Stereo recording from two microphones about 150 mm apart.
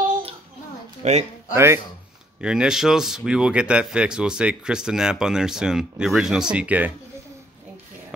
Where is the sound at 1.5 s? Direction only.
15° right (ahead or behind).